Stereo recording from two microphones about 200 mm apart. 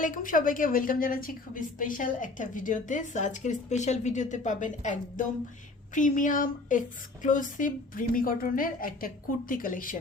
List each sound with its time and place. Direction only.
0.0 s a woman's voice: 40° left (ahead or behind)